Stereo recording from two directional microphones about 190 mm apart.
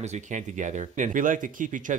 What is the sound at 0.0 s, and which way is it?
Speech, 40° right (ahead or behind).